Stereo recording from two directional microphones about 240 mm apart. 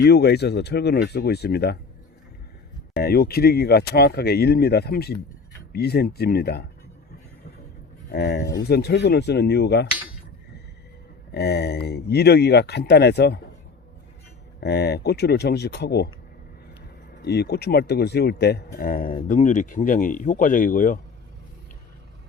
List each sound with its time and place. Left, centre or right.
0.0 s speech: left
2.9 s speech: left
8.1 s speech: left
11.3 s speech: left
14.6 s speech: left
17.2 s speech: left